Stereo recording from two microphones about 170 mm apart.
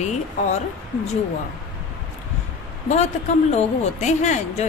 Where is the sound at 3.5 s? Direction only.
40° left (ahead or behind).